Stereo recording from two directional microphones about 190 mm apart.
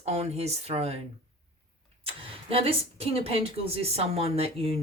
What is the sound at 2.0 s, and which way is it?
Speech, 30° right (ahead or behind).